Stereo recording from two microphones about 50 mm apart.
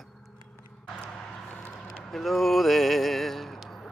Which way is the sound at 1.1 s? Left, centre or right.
Centre.